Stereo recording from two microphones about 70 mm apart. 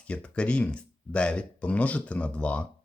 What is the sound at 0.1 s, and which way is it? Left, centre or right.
Speech, centre.